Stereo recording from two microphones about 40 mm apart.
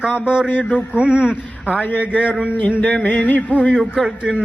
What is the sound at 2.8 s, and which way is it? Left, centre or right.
Music, left.